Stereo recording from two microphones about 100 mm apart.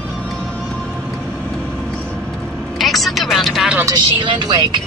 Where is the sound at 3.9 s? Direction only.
55° right (ahead or behind).